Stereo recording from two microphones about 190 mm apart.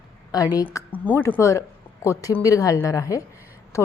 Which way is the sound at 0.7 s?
10° left (ahead or behind).